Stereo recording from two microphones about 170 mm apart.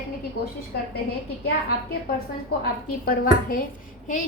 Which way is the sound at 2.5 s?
65° left (ahead or behind).